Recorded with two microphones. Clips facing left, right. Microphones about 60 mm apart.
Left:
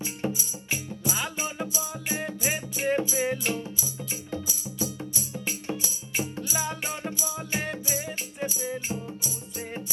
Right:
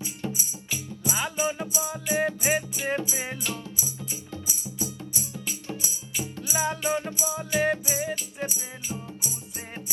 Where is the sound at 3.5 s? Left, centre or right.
Left.